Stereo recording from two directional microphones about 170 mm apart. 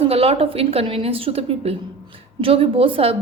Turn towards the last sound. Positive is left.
turn(degrees=-35)  # may be behind; listen again after turning